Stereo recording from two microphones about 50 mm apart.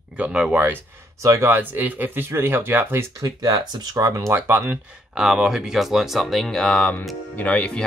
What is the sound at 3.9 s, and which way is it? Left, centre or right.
Speech, right.